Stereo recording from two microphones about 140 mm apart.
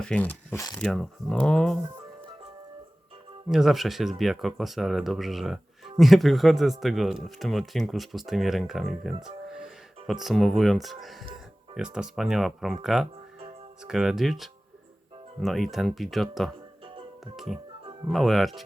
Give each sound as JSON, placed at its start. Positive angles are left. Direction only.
{"t": 0.0, "sound": "speech", "side_deg": 10}
{"t": 3.5, "sound": "speech", "side_deg": 0}
{"t": 16.8, "sound": "music", "side_deg": -40}
{"t": 17.3, "sound": "speech", "side_deg": 0}